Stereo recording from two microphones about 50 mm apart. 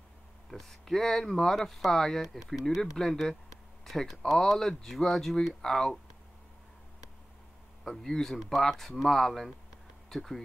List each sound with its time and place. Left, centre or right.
0.5 s speech: centre
7.8 s speech: centre